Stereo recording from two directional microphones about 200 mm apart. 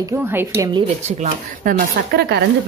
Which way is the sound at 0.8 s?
40° right (ahead or behind).